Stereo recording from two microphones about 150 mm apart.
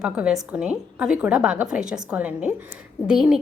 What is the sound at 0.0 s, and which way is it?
A woman's voice, 5° right (ahead or behind).